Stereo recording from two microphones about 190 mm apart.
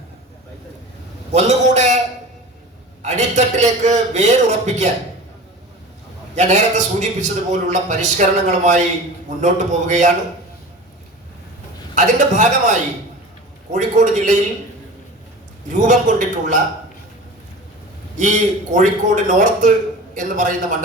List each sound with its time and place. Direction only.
1.3 s a sound: 35° right (ahead or behind)
3.0 s a man's voice: 40° right (ahead or behind)
6.3 s a man's voice: 35° right (ahead or behind)
11.9 s a man's voice: 40° right (ahead or behind)
13.7 s a man's voice: 40° right (ahead or behind)
15.7 s a man's voice: 40° right (ahead or behind)
18.2 s a man's voice: 40° right (ahead or behind)